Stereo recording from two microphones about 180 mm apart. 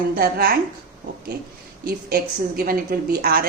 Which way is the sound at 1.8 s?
55° right (ahead or behind).